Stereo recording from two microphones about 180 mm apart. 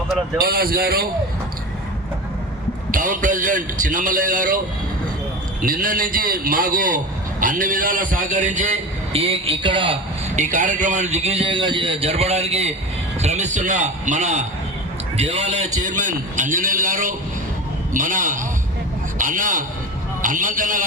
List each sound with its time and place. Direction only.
0.3 s speech: 60° right (ahead or behind)
2.9 s a man's voice: 45° right (ahead or behind)
5.6 s a man's voice: 50° right (ahead or behind); by 10.0 s 30° right (ahead or behind)
10.3 s a man's voice: 45° right (ahead or behind)